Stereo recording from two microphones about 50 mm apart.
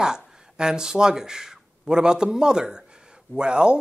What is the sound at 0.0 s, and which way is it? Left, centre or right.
Speech, centre.